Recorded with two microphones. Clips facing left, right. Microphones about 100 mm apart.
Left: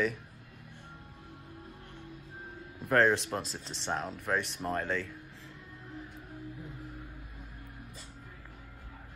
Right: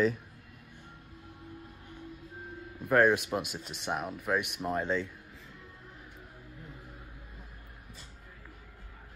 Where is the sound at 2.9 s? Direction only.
10° right (ahead or behind).